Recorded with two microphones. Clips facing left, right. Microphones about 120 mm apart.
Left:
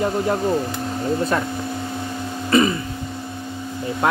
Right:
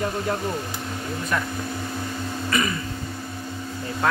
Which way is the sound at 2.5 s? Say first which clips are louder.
Left 9 dB; 25° left (ahead or behind).